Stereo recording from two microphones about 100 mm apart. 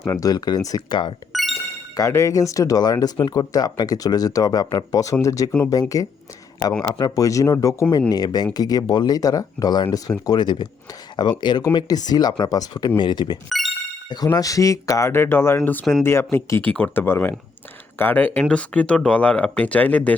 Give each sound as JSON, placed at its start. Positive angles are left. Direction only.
{"t": 0.0, "sound": "speech", "side_deg": 25}
{"t": 0.3, "sound": "speech", "side_deg": 40}
{"t": 1.3, "sound": "music", "side_deg": 0}
{"t": 2.0, "sound": "speech", "side_deg": 30}
{"t": 14.3, "sound": "speech", "side_deg": 35}